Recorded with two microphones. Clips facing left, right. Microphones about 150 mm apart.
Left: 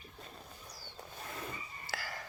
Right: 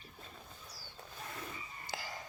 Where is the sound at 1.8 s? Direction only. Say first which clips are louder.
Left 1 dB; 20° right (ahead or behind).